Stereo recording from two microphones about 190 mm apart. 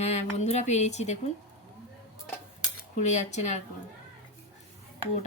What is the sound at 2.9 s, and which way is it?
Speech, 35° left (ahead or behind).